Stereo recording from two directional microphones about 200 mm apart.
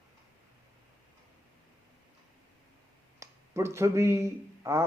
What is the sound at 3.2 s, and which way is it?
Speech, 15° right (ahead or behind).